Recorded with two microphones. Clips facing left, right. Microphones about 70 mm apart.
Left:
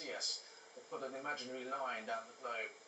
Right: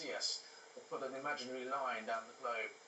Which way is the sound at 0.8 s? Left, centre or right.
Centre.